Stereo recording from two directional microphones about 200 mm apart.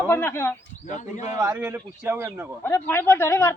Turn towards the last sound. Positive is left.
turn(degrees=15)  # may be behind; listen again after turning